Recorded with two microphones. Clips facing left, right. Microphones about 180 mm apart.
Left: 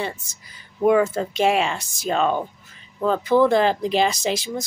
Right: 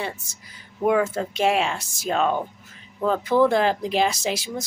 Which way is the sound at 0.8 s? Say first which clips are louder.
Left 3 dB; centre (ahead or behind).